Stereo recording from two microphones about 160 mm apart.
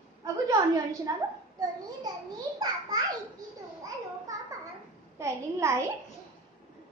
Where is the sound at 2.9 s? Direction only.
25° right (ahead or behind).